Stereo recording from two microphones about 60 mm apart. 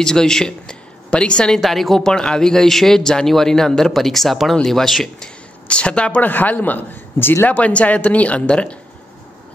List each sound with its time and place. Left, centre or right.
0.0 s a man's voice: centre
1.6 s speech: centre
5.7 s a woman's voice: centre
6.2 s a man's voice: left
7.4 s speech: left